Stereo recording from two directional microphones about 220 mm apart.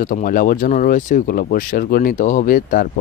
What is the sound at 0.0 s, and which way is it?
Speech, 40° left (ahead or behind).